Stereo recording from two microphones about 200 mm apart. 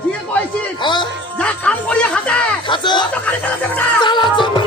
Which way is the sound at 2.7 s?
20° left (ahead or behind).